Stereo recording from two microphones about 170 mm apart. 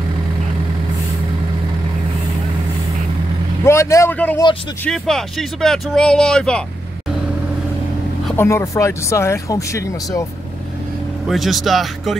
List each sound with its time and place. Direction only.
3.6 s speech: 15° left (ahead or behind)
8.4 s speech: 15° left (ahead or behind)
11.2 s speech: centre (ahead or behind)